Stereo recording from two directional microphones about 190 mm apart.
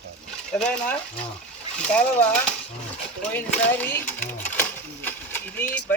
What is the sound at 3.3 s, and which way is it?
Sewing machine, 10° left (ahead or behind).